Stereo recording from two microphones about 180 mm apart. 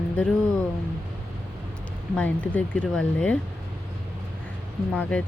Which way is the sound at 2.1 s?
10° left (ahead or behind).